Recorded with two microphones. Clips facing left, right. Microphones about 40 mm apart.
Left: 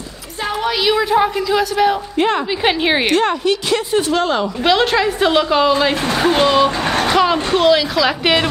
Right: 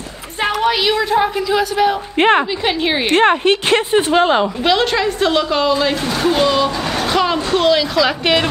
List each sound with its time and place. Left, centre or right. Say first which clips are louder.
1.1 s a woman's voice: even; centre
2.1 s speech: right 8 dB; right
2.6 s a woman's voice: left 2 dB; centre
3.1 s speech: right 3 dB; right
4.1 s a woman's voice: right 5 dB; right
4.6 s a woman's voice: left 4 dB; centre
7.1 s a woman's voice: left 1 dB; centre